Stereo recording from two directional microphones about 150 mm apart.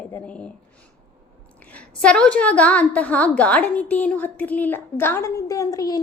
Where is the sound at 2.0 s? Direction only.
5° left (ahead or behind); by 6.0 s 25° left (ahead or behind).